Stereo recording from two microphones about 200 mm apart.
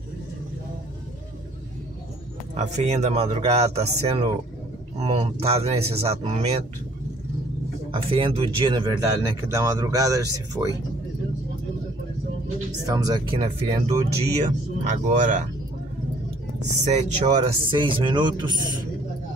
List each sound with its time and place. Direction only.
2.5 s speech: 35° right (ahead or behind)
7.9 s speech: 25° right (ahead or behind)
12.8 s speech: 20° right (ahead or behind)
14.4 s speech: 40° right (ahead or behind)
16.7 s speech: 35° right (ahead or behind)